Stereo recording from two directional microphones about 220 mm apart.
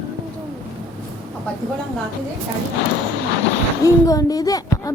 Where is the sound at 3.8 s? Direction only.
15° left (ahead or behind).